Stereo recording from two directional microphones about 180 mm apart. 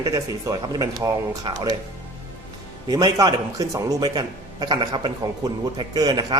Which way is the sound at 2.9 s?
20° right (ahead or behind).